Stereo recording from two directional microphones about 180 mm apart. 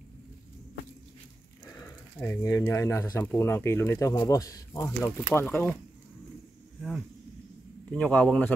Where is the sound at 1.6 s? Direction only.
15° left (ahead or behind).